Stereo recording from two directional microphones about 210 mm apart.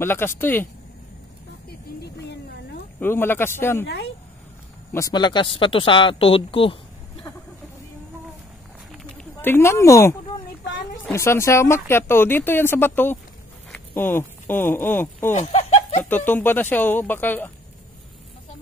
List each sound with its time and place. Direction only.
0.0 s speech: 10° left (ahead or behind)
3.0 s speech: 10° left (ahead or behind)
3.8 s speech: 50° left (ahead or behind)
4.9 s speech: 20° left (ahead or behind)
8.9 s a sound: 5° left (ahead or behind)
11.1 s speech: 15° left (ahead or behind)
15.3 s a sound: 30° left (ahead or behind)
16.0 s speech: 10° left (ahead or behind)